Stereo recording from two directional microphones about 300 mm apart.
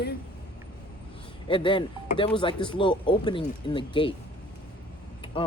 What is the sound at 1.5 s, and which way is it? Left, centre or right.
Speech, centre.